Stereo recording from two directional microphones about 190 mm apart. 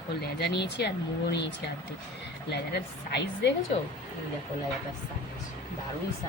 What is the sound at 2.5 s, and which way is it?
Speech, 60° left (ahead or behind).